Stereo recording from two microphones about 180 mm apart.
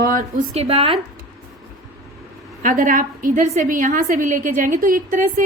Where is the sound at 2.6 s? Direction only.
50° right (ahead or behind).